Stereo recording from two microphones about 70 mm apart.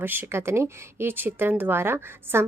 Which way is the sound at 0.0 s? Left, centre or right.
Right.